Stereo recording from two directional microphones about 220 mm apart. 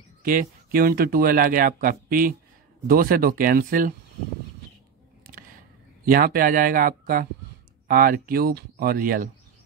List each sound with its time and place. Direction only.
0.2 s speech: 40° right (ahead or behind)
5.2 s a sound: 40° right (ahead or behind)
6.0 s speech: 40° right (ahead or behind)